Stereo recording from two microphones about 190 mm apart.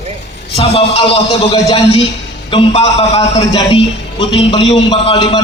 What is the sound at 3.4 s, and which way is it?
A man's voice, 20° left (ahead or behind).